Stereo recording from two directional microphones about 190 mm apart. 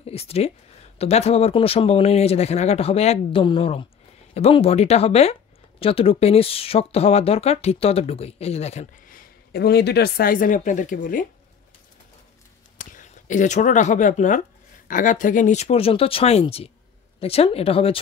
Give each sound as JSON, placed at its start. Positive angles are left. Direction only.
{"t": 0.0, "sound": "speech", "side_deg": 30}
{"t": 12.7, "sound": "speech", "side_deg": 40}